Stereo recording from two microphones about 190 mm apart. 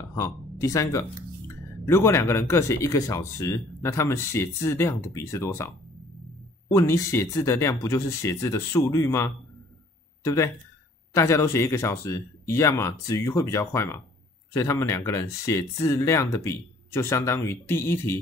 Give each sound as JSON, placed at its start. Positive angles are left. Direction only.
{"t": 0.1, "sound": "speech", "side_deg": 15}
{"t": 6.7, "sound": "speech", "side_deg": 15}